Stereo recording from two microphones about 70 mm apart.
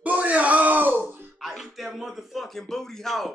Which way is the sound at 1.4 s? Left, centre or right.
Centre.